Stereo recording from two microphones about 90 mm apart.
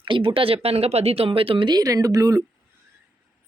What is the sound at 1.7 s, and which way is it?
Speech, 45° right (ahead or behind).